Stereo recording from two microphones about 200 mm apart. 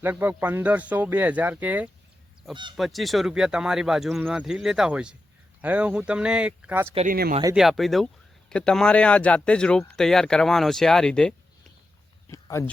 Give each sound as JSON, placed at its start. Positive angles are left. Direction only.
{"t": 0.0, "sound": "speech", "side_deg": -10}
{"t": 6.9, "sound": "speech", "side_deg": -40}
{"t": 7.5, "sound": "speech", "side_deg": 0}
{"t": 12.3, "sound": "speech", "side_deg": 15}